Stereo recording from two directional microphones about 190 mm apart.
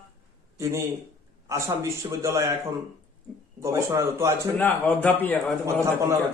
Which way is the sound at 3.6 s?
15° right (ahead or behind).